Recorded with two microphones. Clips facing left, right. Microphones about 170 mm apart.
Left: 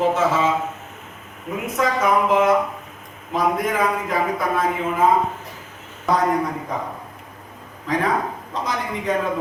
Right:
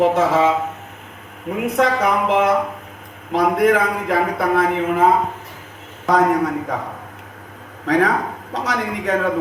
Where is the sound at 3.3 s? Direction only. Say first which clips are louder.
Right 5 dB; 70° right (ahead or behind).